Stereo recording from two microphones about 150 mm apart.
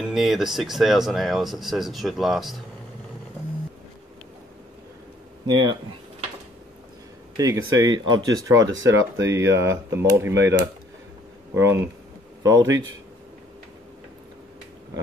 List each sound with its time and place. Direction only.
0.1 s speech: centre (ahead or behind)
5.5 s speech: 30° right (ahead or behind)
7.3 s speech: 20° right (ahead or behind)
11.5 s speech: 20° right (ahead or behind)